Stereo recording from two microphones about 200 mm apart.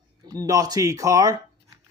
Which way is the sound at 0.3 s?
20° right (ahead or behind).